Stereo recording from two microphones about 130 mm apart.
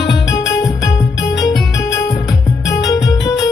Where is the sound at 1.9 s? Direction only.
30° left (ahead or behind).